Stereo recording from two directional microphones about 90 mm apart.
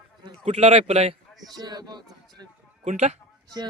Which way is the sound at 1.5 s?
50° right (ahead or behind).